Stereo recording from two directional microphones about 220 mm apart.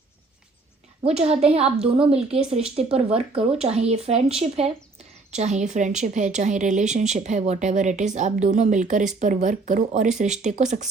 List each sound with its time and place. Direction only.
1.0 s speech: 30° right (ahead or behind)